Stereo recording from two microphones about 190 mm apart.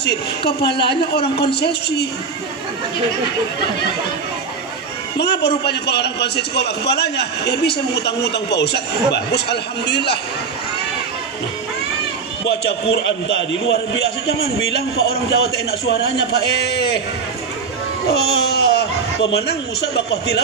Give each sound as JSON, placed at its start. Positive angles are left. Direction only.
{"t": 0.0, "sound": "a man's voice", "side_deg": 60}
{"t": 5.1, "sound": "a man's voice", "side_deg": 60}
{"t": 12.9, "sound": "a man's voice", "side_deg": 70}
{"t": 15.0, "sound": "a man's voice", "side_deg": 60}
{"t": 18.1, "sound": "speech", "side_deg": 60}